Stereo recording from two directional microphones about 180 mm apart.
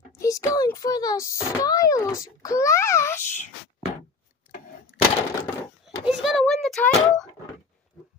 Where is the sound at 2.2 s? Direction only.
20° left (ahead or behind).